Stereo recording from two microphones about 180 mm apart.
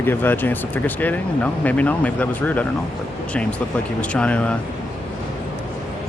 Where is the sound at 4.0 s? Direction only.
5° left (ahead or behind).